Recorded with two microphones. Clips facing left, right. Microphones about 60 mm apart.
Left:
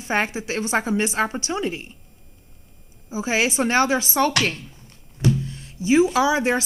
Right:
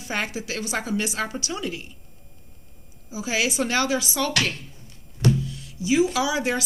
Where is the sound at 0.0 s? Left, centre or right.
Left.